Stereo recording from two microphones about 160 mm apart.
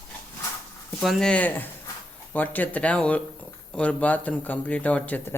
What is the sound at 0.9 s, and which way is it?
Speech, 5° left (ahead or behind).